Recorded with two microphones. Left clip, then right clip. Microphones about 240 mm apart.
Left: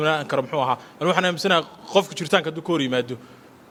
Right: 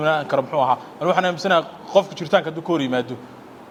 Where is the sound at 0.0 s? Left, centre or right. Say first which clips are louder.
Right 2 dB; left.